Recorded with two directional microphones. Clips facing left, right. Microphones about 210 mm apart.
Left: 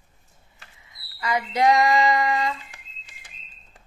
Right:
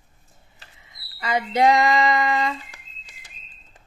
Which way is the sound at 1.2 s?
25° right (ahead or behind).